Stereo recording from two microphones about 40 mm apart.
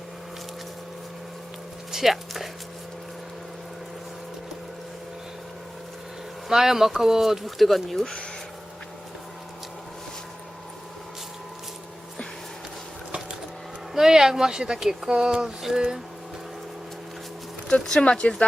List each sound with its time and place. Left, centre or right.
1.9 s speech: centre
6.5 s speech: centre
8.0 s speech: left
13.9 s speech: centre
17.7 s speech: left